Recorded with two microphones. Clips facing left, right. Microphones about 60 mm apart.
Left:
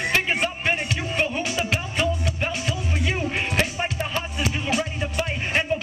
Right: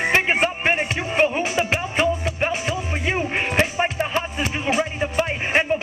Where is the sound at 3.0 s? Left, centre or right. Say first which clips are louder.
Right 3 dB; right.